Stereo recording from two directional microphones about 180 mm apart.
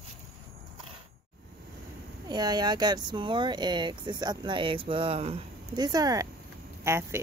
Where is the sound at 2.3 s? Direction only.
20° right (ahead or behind).